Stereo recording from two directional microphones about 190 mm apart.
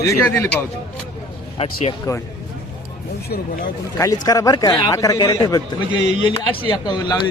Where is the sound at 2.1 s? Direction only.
20° left (ahead or behind).